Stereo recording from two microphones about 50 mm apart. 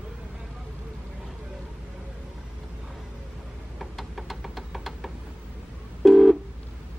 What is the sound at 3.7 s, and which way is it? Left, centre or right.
Knock, centre.